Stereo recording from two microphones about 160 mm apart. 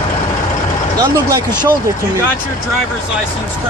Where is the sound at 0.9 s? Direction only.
20° right (ahead or behind).